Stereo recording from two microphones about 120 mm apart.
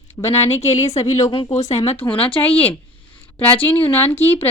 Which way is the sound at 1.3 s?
50° left (ahead or behind).